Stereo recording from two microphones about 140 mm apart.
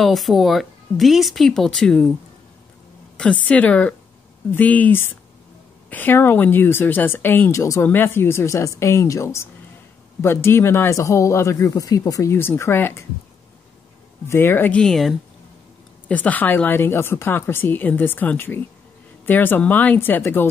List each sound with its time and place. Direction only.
0.0 s speech: centre (ahead or behind)
3.2 s speech: 10° left (ahead or behind)
14.2 s speech: 15° left (ahead or behind)